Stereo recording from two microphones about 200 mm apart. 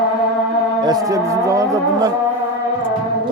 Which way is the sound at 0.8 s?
20° right (ahead or behind).